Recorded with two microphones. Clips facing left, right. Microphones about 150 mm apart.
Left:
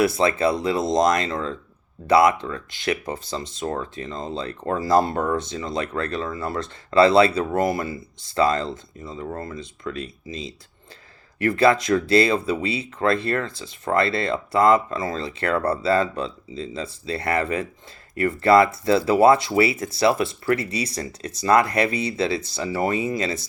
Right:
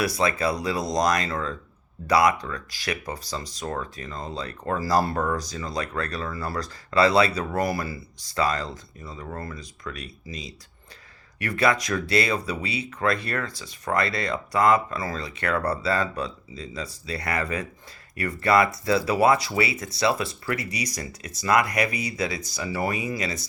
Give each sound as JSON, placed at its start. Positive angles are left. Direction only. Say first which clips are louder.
{"t": 0.0, "sound": "speech", "louder": "left 5 dB", "side_deg": 25}